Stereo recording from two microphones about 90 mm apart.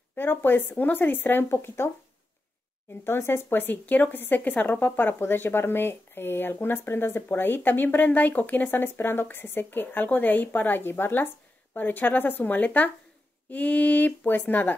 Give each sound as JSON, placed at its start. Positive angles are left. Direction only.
{"t": 0.1, "sound": "speech", "side_deg": 25}
{"t": 3.0, "sound": "speech", "side_deg": 25}